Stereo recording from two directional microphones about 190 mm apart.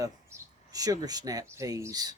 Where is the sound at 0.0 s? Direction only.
15° right (ahead or behind).